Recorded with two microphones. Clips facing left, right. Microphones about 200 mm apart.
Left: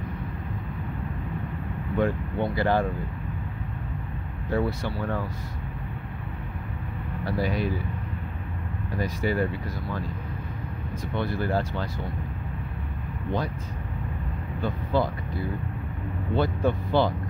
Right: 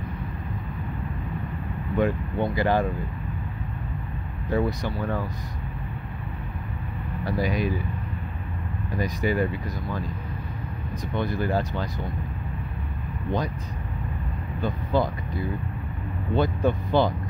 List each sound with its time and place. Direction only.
2.0 s speech: 15° right (ahead or behind)
4.5 s speech: 15° right (ahead or behind)
7.2 s speech: 15° right (ahead or behind)
8.9 s speech: 15° right (ahead or behind)
11.1 s speech: 15° right (ahead or behind)
14.6 s speech: 15° right (ahead or behind)
16.3 s speech: 15° right (ahead or behind)